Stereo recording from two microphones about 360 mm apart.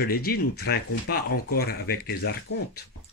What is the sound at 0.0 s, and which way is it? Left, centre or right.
Speech, left.